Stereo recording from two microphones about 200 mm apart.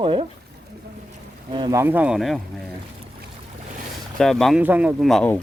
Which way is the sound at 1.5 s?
20° right (ahead or behind).